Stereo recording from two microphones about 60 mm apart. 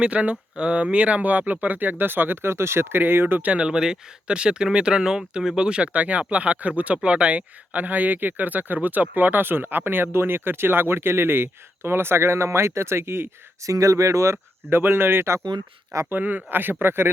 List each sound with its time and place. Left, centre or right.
0.0 s speech: right
3.5 s speech: centre; by 13.2 s right
13.7 s speech: right
14.7 s speech: right
16.0 s speech: right